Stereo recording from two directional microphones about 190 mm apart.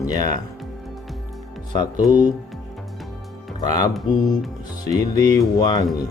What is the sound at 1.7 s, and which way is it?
Speech, 25° left (ahead or behind).